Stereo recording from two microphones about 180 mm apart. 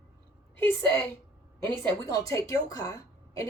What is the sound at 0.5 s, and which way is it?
A woman's voice, 10° left (ahead or behind).